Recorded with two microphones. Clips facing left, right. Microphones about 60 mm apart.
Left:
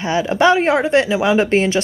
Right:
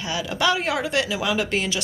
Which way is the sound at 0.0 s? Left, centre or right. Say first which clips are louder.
Left 9 dB; left.